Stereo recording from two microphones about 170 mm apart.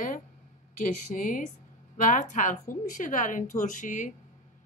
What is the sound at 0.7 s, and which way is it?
A woman's voice, 50° left (ahead or behind).